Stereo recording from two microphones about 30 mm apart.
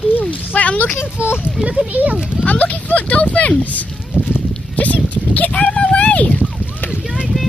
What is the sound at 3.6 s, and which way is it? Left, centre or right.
Speech, left.